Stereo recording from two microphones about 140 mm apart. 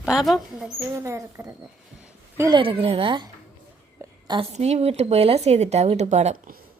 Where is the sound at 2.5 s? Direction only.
40° right (ahead or behind).